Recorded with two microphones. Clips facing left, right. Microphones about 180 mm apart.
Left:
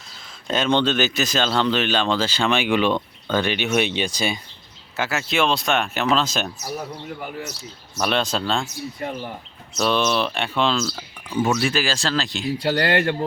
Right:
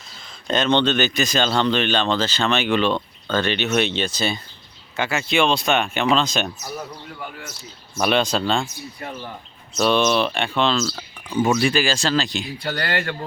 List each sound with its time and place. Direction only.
0.4 s speech: 5° left (ahead or behind)
4.9 s speech: 5° left (ahead or behind)
7.9 s speech: 5° right (ahead or behind)
9.7 s speech: centre (ahead or behind)
12.5 s speech: 25° left (ahead or behind)